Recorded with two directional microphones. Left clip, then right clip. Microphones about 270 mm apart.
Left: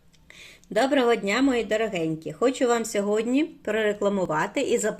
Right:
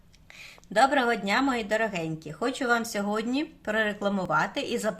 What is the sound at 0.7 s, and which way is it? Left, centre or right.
Speech, right.